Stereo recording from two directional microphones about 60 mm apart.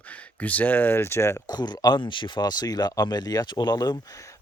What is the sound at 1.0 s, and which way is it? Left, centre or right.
Speech, left.